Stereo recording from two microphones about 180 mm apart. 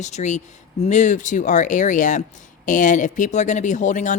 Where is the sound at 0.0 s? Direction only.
40° left (ahead or behind).